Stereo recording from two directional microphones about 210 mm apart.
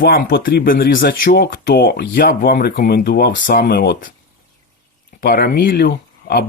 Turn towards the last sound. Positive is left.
turn(degrees=45)  # may be behind; listen again after turning